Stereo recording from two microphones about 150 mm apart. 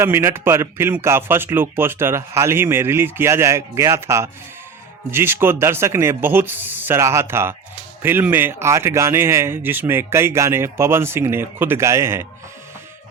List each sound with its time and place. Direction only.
0.0 s speech: 15° right (ahead or behind)